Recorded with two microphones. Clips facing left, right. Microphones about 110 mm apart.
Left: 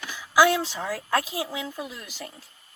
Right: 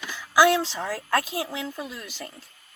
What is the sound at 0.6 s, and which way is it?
Speech, 15° left (ahead or behind).